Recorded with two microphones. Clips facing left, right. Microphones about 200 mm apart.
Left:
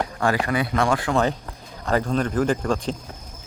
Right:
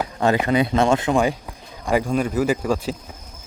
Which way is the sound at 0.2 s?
20° right (ahead or behind).